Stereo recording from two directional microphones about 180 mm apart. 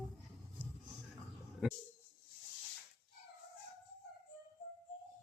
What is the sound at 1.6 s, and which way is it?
Speech, centre (ahead or behind).